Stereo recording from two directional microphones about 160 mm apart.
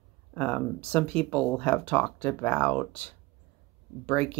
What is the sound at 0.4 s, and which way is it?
Speech, 5° left (ahead or behind).